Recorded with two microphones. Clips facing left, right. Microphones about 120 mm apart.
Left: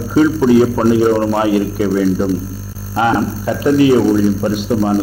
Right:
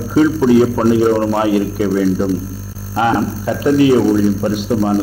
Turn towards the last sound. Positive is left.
turn(degrees=25)  # may be behind; listen again after turning